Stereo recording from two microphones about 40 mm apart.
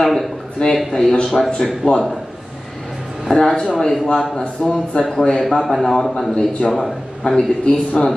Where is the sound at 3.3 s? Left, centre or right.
Centre.